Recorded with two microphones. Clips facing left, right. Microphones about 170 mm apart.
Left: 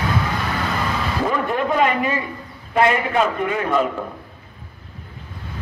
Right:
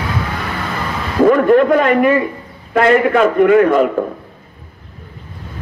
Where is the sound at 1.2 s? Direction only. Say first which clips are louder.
Right 14 dB; 55° right (ahead or behind).